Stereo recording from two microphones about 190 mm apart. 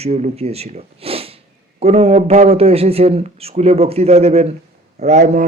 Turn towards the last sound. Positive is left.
turn(degrees=-40)  # may be behind; listen again after turning